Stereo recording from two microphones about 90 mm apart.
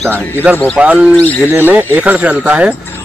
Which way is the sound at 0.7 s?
15° right (ahead or behind).